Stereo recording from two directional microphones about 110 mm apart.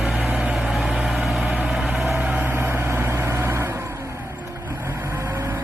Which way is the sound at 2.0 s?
15° right (ahead or behind).